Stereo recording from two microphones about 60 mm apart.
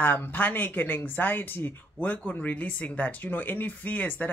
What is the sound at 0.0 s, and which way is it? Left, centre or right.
Speech, left.